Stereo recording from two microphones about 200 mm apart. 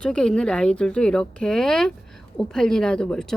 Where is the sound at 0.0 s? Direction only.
5° left (ahead or behind).